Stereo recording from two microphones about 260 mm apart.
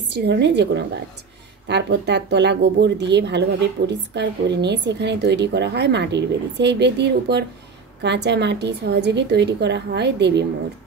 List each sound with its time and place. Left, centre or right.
0.1 s speech: right